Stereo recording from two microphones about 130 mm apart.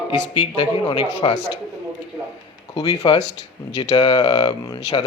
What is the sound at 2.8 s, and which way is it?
Speech, 30° left (ahead or behind).